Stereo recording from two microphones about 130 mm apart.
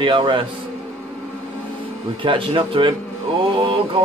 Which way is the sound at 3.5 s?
40° right (ahead or behind).